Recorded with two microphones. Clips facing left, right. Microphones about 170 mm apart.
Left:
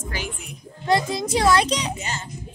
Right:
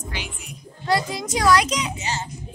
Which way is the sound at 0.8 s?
20° left (ahead or behind).